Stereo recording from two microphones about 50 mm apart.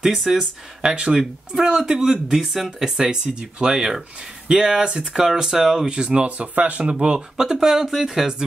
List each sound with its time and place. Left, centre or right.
0.0 s speech: centre
3.0 s speech: centre